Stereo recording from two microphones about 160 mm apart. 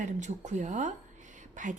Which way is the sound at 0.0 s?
50° right (ahead or behind).